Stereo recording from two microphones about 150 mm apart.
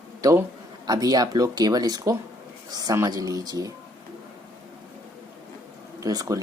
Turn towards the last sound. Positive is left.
turn(degrees=-25)  # may be behind; listen again after turning